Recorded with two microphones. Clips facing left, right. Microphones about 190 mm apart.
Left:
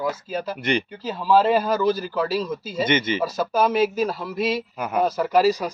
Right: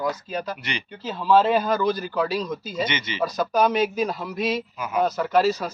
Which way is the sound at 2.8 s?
50° left (ahead or behind).